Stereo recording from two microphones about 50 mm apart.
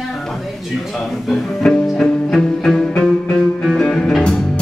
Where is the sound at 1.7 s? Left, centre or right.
Centre.